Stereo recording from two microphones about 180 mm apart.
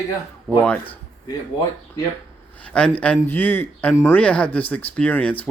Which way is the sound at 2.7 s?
5° left (ahead or behind).